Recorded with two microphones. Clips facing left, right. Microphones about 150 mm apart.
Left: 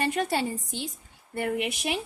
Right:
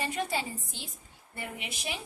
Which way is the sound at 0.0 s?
60° left (ahead or behind).